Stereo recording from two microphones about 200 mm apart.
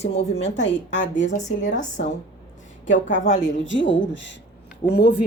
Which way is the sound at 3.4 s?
70° left (ahead or behind).